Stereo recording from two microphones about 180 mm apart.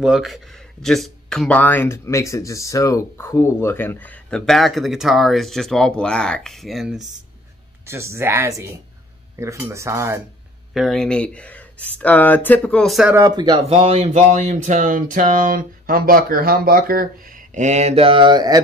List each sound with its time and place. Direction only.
0.0 s speech: centre (ahead or behind)
7.8 s speech: 15° right (ahead or behind)
10.7 s speech: centre (ahead or behind)
13.1 s speech: 20° right (ahead or behind)
13.7 s speech: 35° right (ahead or behind)